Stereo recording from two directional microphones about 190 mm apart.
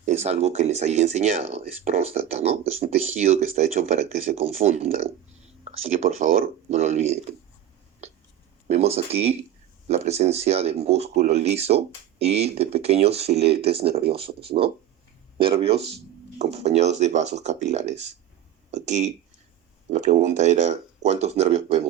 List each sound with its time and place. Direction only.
0.0 s speech: 35° right (ahead or behind)
8.6 s speech: 35° right (ahead or behind)